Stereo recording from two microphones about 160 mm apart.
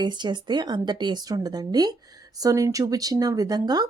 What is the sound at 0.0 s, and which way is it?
Speech, 25° right (ahead or behind).